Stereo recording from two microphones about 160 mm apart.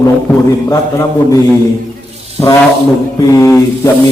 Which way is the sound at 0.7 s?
20° left (ahead or behind).